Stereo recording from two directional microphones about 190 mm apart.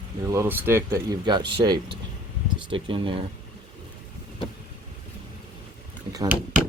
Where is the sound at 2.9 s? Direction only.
25° right (ahead or behind).